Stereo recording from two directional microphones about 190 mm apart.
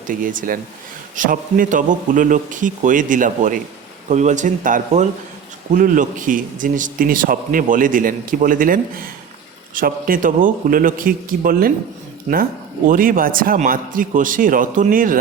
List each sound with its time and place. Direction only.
0.1 s a man's voice: 45° right (ahead or behind)
12.9 s a man's voice: 50° right (ahead or behind)